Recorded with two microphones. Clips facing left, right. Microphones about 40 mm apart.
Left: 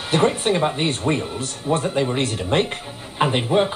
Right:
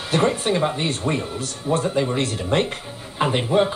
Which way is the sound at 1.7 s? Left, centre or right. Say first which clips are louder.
Even; left.